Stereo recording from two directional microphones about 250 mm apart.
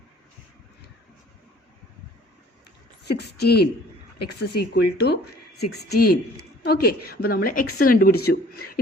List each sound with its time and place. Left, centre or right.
3.1 s speech: left